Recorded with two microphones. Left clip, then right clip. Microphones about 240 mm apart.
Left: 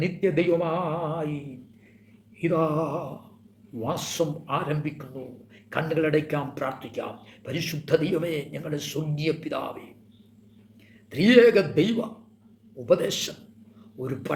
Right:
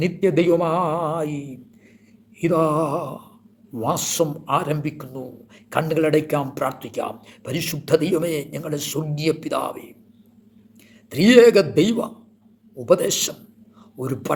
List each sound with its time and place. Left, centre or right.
0.0 s speech: right
11.1 s speech: right